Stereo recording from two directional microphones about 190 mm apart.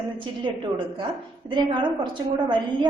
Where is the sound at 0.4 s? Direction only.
25° right (ahead or behind).